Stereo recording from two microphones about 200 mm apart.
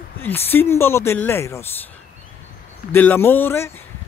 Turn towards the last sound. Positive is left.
turn(degrees=10)  # may be behind; listen again after turning